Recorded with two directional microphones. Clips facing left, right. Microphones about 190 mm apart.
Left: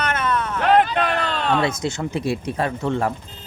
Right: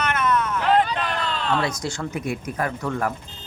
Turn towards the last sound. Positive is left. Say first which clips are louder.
# left 3 dB
turn(degrees=25)  # may be behind; listen again after turning